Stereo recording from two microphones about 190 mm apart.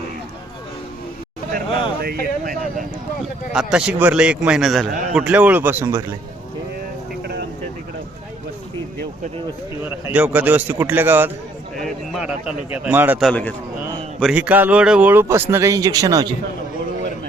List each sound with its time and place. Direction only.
2.0 s speech: 50° right (ahead or behind)
3.5 s a man's voice: 5° right (ahead or behind)
9.8 s a man's voice: 10° right (ahead or behind)
13.2 s speech: 10° left (ahead or behind)
14.2 s a man's voice: 5° right (ahead or behind); by 16.3 s 20° right (ahead or behind)